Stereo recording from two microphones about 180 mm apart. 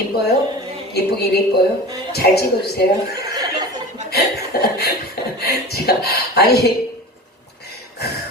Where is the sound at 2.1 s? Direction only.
60° left (ahead or behind).